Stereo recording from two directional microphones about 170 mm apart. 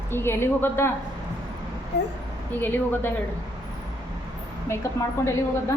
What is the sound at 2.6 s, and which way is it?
Speech, 10° left (ahead or behind).